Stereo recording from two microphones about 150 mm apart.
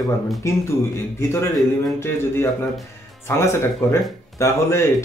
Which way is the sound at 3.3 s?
20° left (ahead or behind).